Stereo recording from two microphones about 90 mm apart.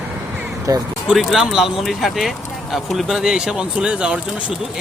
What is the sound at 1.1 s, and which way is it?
Speech, 5° right (ahead or behind).